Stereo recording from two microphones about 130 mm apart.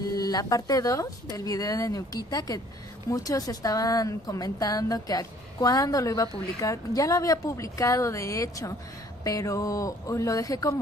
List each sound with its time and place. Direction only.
0.1 s a woman's voice: 30° left (ahead or behind)